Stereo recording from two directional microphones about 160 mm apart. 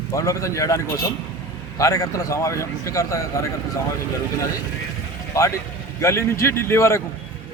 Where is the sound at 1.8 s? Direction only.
20° left (ahead or behind).